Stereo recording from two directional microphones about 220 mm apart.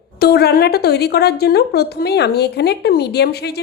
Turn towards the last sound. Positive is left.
turn(degrees=45)  # may be behind; listen again after turning